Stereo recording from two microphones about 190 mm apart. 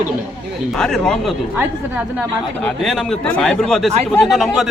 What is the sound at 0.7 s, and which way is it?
Speech, centre (ahead or behind).